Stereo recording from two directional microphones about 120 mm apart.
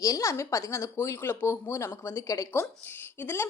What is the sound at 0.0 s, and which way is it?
A woman's voice, 25° left (ahead or behind).